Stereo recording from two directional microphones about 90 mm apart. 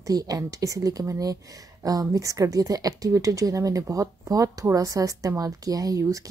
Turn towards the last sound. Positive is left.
turn(degrees=-40)  # may be behind; listen again after turning